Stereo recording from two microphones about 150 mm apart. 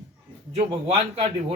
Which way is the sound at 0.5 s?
45° right (ahead or behind).